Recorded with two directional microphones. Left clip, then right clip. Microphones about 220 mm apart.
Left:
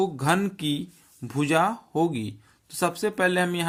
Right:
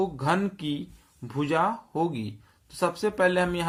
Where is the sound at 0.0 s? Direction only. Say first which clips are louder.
Left 2 dB; 35° left (ahead or behind).